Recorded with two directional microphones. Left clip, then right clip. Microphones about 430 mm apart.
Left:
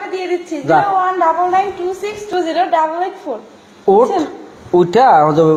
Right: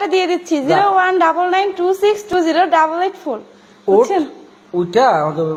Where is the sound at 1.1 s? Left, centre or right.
Right.